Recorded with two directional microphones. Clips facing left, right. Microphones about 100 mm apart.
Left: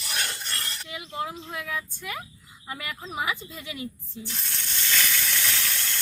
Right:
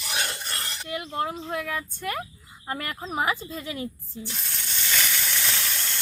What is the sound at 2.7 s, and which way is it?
Speech, 40° right (ahead or behind).